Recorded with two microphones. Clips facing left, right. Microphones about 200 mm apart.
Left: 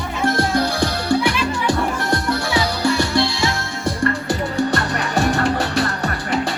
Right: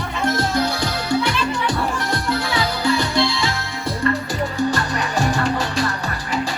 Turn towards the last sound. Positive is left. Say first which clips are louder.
# left 2 dB
turn(degrees=60)  # may be behind; listen again after turning